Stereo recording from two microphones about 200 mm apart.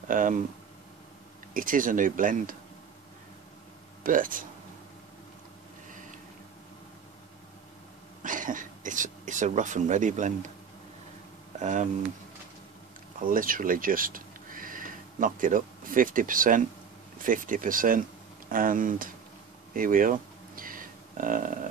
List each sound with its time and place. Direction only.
0.1 s speech: 40° right (ahead or behind)
1.5 s speech: 45° right (ahead or behind)
4.0 s speech: 45° right (ahead or behind)
8.2 s speech: 40° right (ahead or behind)
11.6 s speech: 40° right (ahead or behind)
13.2 s speech: 45° right (ahead or behind)
19.7 s a sound: 45° right (ahead or behind)